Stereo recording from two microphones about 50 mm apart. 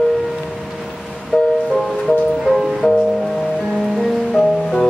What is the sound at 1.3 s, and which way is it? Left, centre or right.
Music, left.